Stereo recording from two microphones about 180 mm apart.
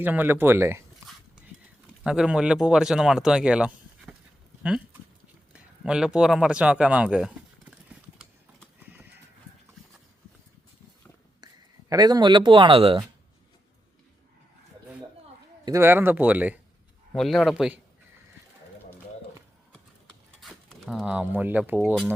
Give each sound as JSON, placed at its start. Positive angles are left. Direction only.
{"t": 0.0, "sound": "speech", "side_deg": -10}
{"t": 2.0, "sound": "speech", "side_deg": -5}
{"t": 5.5, "sound": "a sound", "side_deg": -5}
{"t": 11.9, "sound": "speech", "side_deg": -20}
{"t": 15.6, "sound": "speech", "side_deg": -15}
{"t": 20.1, "sound": "a sound", "side_deg": 0}